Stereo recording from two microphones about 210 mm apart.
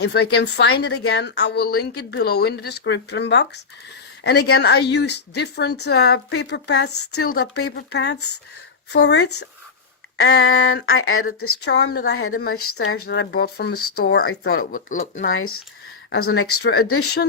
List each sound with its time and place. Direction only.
0.0 s speech: 50° left (ahead or behind)
10.9 s speech: 80° left
11.6 s speech: 55° left (ahead or behind)
12.5 s speech: 90° left
12.7 s speech: 55° left (ahead or behind)
14.3 s speech: 80° left
14.7 s speech: 35° left (ahead or behind)
15.2 s speech: 70° left (ahead or behind); by 17.0 s 90° left